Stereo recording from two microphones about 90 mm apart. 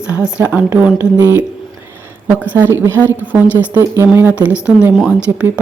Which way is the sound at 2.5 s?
25° right (ahead or behind).